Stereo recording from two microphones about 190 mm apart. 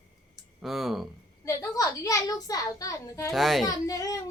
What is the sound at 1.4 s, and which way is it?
A child's voice, 15° left (ahead or behind).